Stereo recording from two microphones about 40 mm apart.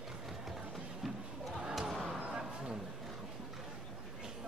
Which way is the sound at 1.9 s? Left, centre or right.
Centre.